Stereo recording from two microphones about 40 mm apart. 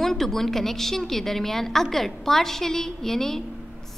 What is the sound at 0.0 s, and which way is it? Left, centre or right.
A woman's voice, centre.